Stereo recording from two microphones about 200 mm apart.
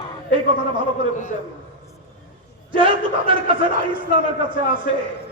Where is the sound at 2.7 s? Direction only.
25° right (ahead or behind).